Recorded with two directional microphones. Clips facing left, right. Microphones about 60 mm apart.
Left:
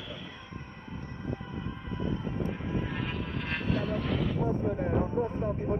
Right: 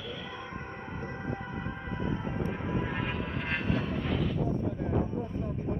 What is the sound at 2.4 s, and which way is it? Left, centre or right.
Vehicle, centre.